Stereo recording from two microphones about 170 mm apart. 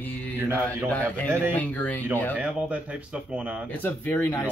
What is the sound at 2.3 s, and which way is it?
Speech, 10° right (ahead or behind).